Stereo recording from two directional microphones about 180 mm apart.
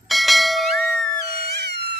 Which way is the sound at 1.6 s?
65° right (ahead or behind).